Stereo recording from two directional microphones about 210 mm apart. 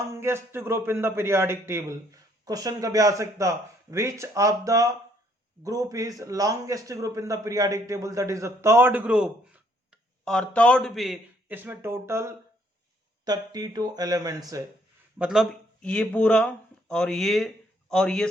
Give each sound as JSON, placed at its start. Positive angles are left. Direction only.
{"t": 0.1, "sound": "a man's voice", "side_deg": -10}
{"t": 15.2, "sound": "speech", "side_deg": 0}